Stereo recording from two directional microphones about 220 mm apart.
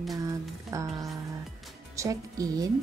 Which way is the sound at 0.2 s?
15° right (ahead or behind).